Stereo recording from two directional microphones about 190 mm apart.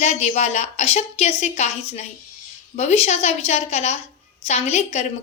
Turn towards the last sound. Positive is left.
turn(degrees=35)  # may be behind; listen again after turning